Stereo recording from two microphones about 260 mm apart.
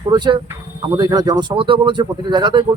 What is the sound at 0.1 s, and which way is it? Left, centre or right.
Speech, centre.